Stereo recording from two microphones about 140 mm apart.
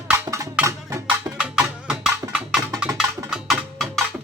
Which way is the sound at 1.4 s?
5° right (ahead or behind).